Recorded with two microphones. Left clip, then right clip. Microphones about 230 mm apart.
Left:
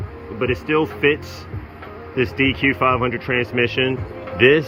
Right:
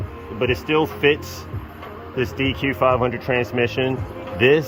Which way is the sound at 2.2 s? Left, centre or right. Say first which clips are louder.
Left 5 dB; centre.